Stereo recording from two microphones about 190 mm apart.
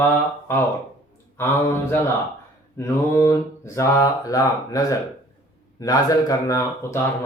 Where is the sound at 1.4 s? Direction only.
10° left (ahead or behind).